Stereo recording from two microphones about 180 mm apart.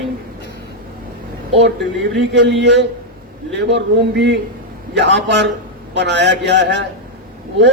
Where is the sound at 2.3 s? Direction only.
75° right (ahead or behind).